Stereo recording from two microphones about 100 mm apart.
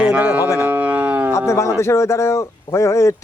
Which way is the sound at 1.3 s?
30° left (ahead or behind).